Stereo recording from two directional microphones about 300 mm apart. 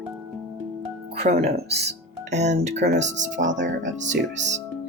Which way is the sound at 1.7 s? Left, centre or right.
Right.